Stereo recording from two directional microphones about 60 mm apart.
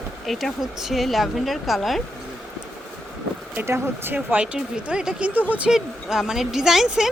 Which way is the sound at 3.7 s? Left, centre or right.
Right.